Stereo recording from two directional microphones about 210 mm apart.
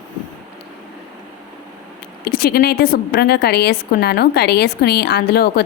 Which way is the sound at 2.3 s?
45° left (ahead or behind).